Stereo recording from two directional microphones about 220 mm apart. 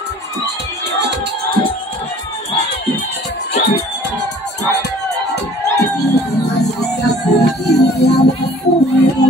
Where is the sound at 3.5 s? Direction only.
40° left (ahead or behind).